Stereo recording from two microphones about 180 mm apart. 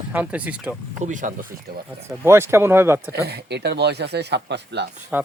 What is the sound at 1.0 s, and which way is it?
Speech, 45° right (ahead or behind).